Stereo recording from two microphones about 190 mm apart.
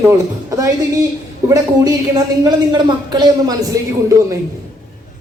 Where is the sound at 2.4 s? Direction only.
20° right (ahead or behind).